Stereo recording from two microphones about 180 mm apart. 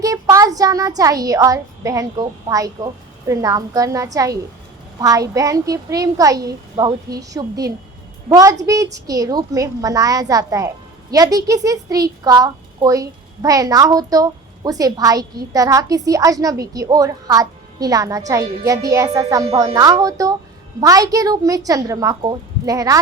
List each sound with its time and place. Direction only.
0.0 s a child's voice: 20° right (ahead or behind)